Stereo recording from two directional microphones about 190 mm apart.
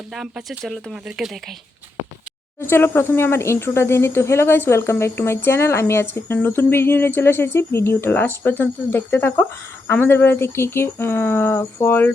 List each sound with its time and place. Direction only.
0.1 s speech: centre (ahead or behind)
2.6 s speech: 10° left (ahead or behind)